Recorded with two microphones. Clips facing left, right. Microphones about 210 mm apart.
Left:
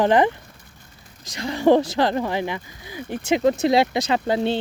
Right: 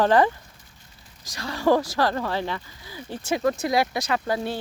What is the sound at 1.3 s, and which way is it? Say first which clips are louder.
Speech: left 4 dB; 20° left (ahead or behind).